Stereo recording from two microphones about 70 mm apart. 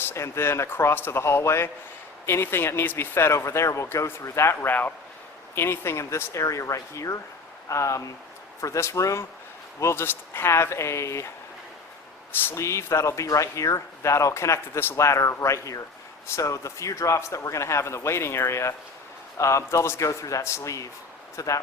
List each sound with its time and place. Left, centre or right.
0.0 s speech: left
4.7 s speech: left
9.8 s speech: left
12.5 s speech: left